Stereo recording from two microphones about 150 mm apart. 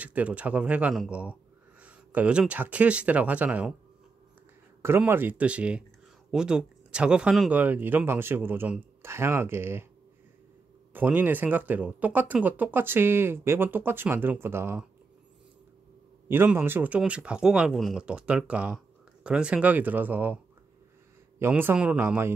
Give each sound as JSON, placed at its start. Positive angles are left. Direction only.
{"t": 0.0, "sound": "speech", "side_deg": -10}
{"t": 4.8, "sound": "speech", "side_deg": -15}
{"t": 10.9, "sound": "speech", "side_deg": -10}
{"t": 16.3, "sound": "speech", "side_deg": -15}
{"t": 21.4, "sound": "speech", "side_deg": -15}